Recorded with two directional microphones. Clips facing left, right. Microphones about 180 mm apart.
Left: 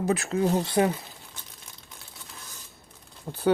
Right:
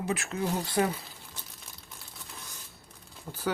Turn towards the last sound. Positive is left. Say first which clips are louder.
# left 9 dB
turn(degrees=30)  # may be behind; listen again after turning